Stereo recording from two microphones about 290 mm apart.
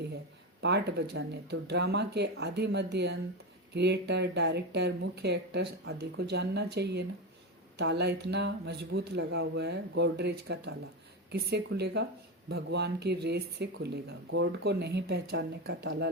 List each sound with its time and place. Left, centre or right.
0.6 s speech: right